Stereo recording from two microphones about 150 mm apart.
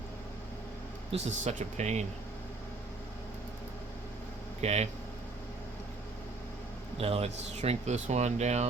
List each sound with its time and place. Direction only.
1.1 s speech: 50° right (ahead or behind)
4.6 s speech: 45° right (ahead or behind)
6.9 s speech: 40° right (ahead or behind)